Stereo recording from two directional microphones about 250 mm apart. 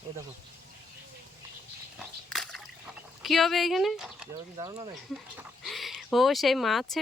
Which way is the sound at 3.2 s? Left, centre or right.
Centre.